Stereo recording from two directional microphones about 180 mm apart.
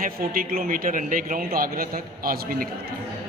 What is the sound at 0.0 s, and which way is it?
A man's voice, 55° right (ahead or behind).